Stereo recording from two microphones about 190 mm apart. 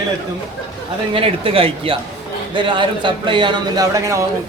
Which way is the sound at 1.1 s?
30° right (ahead or behind).